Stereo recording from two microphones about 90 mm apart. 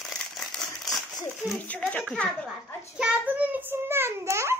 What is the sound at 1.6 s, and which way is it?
Speech, 15° left (ahead or behind).